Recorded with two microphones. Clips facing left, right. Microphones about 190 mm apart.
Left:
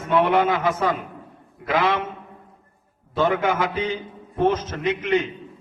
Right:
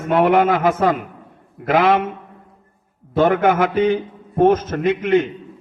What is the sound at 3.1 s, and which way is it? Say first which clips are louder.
A man's voice: right 6 dB; 55° right (ahead or behind).